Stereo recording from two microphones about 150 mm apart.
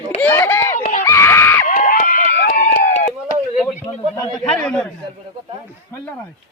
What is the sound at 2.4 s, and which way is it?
Run, 65° left (ahead or behind).